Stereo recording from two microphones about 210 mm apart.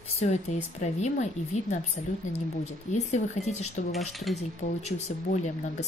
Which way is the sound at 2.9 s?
35° left (ahead or behind).